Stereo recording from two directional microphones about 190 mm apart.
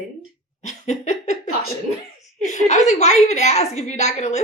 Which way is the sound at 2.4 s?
40° left (ahead or behind).